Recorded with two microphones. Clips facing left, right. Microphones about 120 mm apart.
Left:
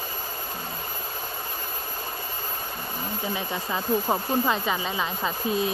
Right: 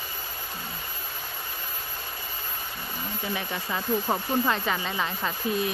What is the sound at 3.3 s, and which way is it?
Speech, 15° left (ahead or behind).